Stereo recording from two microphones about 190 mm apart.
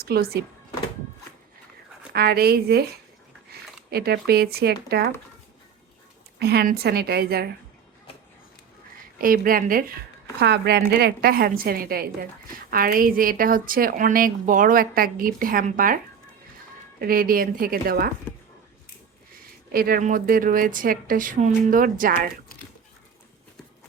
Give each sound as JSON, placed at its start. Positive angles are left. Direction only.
{"t": 0.0, "sound": "speech", "side_deg": -55}
{"t": 2.1, "sound": "speech", "side_deg": -55}
{"t": 3.8, "sound": "speech", "side_deg": -55}
{"t": 6.4, "sound": "speech", "side_deg": -55}
{"t": 9.2, "sound": "a woman's voice", "side_deg": -50}
{"t": 10.4, "sound": "a woman's voice", "side_deg": -60}
{"t": 17.0, "sound": "a woman's voice", "side_deg": -50}
{"t": 19.7, "sound": "a woman's voice", "side_deg": -50}